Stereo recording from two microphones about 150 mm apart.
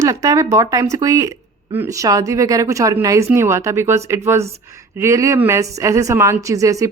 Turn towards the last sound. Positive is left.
turn(degrees=-20)  # may be behind; listen again after turning